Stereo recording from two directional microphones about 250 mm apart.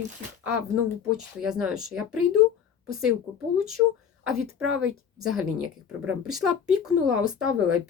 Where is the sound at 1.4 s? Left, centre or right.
Centre.